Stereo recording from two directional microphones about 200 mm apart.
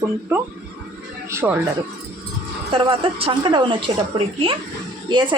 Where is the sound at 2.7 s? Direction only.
25° right (ahead or behind).